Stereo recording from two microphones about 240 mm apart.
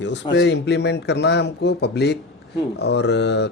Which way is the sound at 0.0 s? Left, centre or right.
Left.